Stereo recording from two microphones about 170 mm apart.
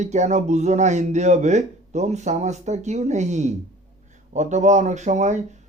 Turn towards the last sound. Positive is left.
turn(degrees=-45)  # may be behind; listen again after turning